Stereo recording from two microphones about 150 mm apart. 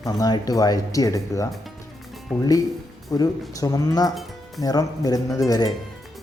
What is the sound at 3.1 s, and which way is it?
Speech, 25° left (ahead or behind).